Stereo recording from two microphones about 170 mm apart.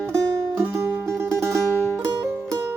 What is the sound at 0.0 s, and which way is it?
Music, 15° right (ahead or behind).